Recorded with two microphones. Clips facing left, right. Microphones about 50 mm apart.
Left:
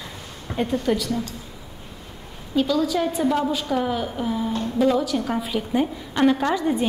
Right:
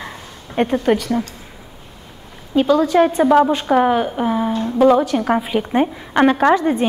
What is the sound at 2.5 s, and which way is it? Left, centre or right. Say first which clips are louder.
A woman's voice: right 7 dB; right.